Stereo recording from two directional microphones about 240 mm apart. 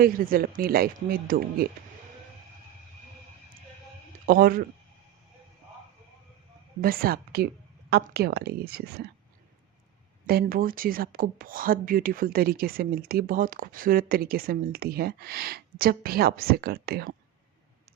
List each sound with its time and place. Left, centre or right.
0.0 s speech: right
4.3 s speech: right
6.8 s speech: right
10.2 s speech: right